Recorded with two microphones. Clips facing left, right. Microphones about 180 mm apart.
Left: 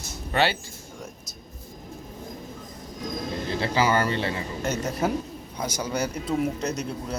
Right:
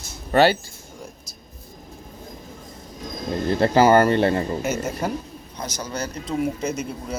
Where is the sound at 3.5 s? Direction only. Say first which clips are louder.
Right 8 dB; 50° right (ahead or behind).